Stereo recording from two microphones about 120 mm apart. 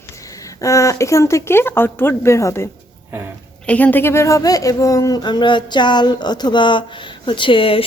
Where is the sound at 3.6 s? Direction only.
10° left (ahead or behind).